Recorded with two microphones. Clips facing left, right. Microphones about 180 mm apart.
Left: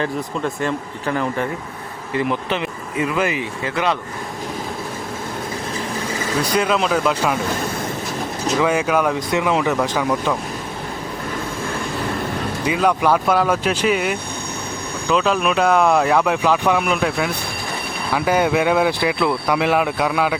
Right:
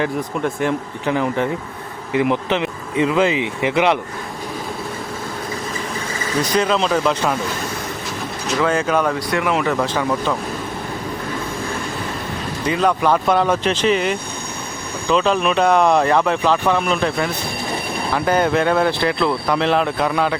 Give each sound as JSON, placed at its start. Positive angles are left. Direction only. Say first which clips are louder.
{"t": 0.0, "sound": "speech", "louder": "right 2 dB", "side_deg": -15}
{"t": 6.6, "sound": "speech", "louder": "right 1 dB", "side_deg": 5}
{"t": 8.5, "sound": "speech", "louder": "even", "side_deg": 10}
{"t": 9.1, "sound": "speech", "louder": "left 1 dB", "side_deg": 20}
{"t": 12.6, "sound": "speech", "louder": "even", "side_deg": 10}